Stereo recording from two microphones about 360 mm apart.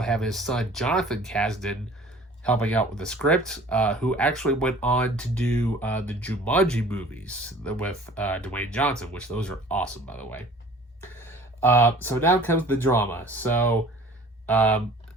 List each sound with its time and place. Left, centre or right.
0.0 s speech: centre